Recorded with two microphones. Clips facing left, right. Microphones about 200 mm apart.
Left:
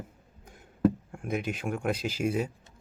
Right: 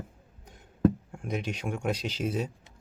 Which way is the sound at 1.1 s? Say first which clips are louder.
Left 1 dB; 5° left (ahead or behind).